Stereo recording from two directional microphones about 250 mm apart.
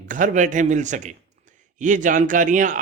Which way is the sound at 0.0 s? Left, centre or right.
Right.